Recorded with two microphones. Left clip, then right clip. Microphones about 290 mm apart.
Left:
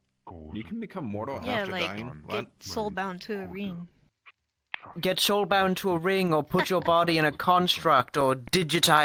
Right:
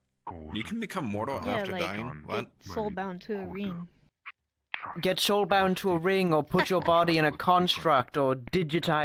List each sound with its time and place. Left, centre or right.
0.3 s speech: right
1.2 s speech: centre
2.6 s speech: left
3.5 s speech: centre
4.9 s speech: centre; by 9.0 s left